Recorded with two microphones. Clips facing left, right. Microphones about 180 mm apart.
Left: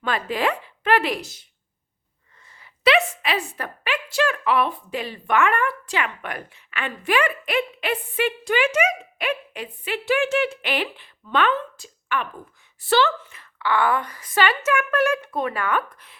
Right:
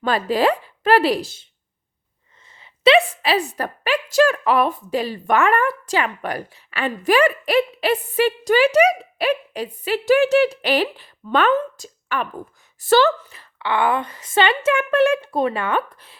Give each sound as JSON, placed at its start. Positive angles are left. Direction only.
{"t": 0.0, "sound": "a woman's voice", "side_deg": -35}
{"t": 2.5, "sound": "a sound", "side_deg": -25}
{"t": 3.6, "sound": "a woman's voice", "side_deg": -40}